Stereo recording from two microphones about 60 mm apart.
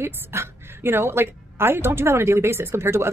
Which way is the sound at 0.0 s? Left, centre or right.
Right.